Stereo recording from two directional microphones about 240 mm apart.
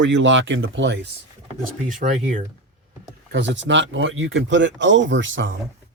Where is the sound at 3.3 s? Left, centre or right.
Right.